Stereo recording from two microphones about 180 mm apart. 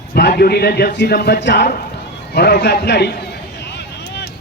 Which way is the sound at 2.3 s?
65° left (ahead or behind).